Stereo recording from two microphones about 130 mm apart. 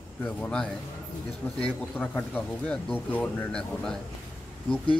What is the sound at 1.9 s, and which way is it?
Speech, 10° left (ahead or behind).